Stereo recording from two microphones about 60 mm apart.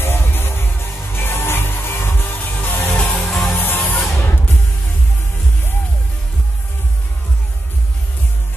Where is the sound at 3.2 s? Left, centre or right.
Centre.